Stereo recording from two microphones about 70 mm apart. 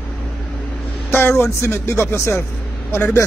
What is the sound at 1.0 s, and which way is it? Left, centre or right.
Speech, left.